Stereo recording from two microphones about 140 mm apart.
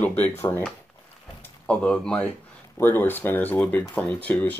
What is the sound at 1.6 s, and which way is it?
Speech, 5° left (ahead or behind).